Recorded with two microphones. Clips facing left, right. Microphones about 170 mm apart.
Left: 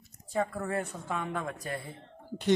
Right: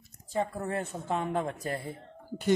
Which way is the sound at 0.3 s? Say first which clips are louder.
Even; 25° right (ahead or behind).